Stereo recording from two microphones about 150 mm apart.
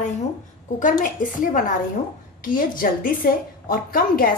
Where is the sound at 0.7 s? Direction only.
60° left (ahead or behind).